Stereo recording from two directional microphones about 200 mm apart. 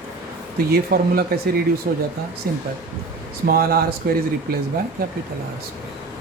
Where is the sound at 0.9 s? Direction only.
50° right (ahead or behind).